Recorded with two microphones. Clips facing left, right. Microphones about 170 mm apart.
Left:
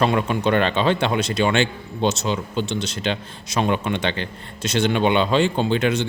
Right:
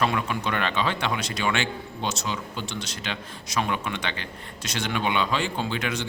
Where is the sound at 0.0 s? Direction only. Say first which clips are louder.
Left 6 dB; 30° left (ahead or behind).